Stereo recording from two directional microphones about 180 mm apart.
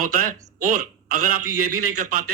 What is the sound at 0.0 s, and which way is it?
A man's voice, 50° right (ahead or behind).